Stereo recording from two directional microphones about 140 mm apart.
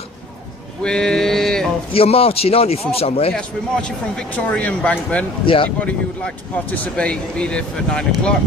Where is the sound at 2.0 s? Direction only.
45° left (ahead or behind).